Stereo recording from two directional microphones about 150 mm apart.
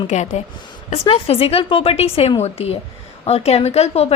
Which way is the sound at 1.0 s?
35° left (ahead or behind).